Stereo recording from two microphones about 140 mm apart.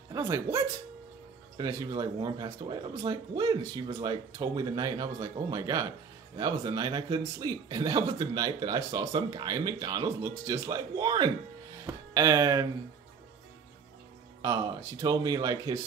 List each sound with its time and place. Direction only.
0.1 s a man's voice: 20° right (ahead or behind)
14.4 s a man's voice: 25° right (ahead or behind)